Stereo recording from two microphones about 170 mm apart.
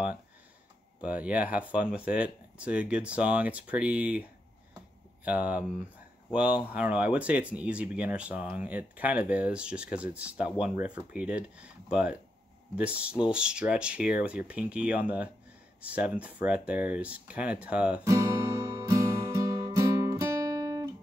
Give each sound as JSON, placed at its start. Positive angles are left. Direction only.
{"t": 1.0, "sound": "speech", "side_deg": -10}
{"t": 18.0, "sound": "music", "side_deg": -15}